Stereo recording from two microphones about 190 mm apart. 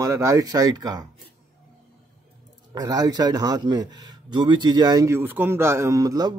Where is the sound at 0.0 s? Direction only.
15° right (ahead or behind).